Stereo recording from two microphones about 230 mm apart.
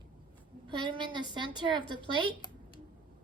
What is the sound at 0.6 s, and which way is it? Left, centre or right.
A woman's voice, right.